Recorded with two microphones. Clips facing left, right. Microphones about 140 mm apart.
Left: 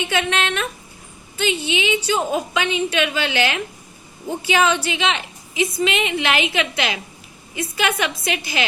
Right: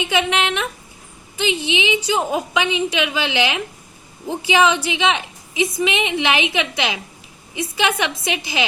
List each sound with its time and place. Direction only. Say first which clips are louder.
0.0 s a woman's voice: right 2 dB; 15° right (ahead or behind)